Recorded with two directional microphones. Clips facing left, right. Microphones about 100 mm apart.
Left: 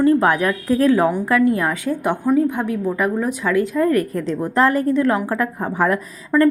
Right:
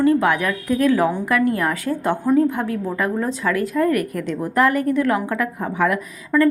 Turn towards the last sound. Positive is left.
turn(degrees=30)  # may be behind; listen again after turning